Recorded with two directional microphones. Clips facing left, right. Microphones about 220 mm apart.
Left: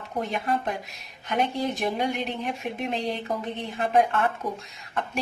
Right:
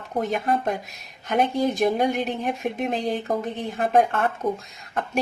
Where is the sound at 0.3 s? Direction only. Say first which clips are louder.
Right 4 dB; 45° right (ahead or behind).